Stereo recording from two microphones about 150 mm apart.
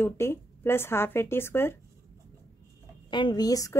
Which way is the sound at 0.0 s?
15° left (ahead or behind).